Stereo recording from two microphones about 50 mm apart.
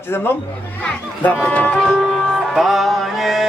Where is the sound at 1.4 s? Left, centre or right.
Left.